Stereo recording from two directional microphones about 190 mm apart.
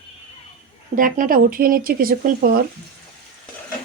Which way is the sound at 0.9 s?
45° right (ahead or behind).